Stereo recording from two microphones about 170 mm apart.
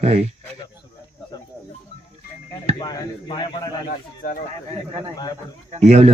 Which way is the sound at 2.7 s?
25° left (ahead or behind).